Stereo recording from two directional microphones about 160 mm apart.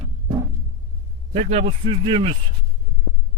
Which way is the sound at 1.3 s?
40° right (ahead or behind).